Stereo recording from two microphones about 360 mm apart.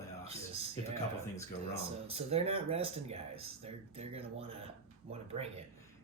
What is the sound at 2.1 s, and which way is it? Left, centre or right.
Speech, centre.